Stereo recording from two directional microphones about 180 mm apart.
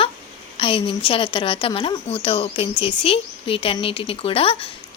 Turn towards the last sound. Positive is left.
turn(degrees=30)  # may be behind; listen again after turning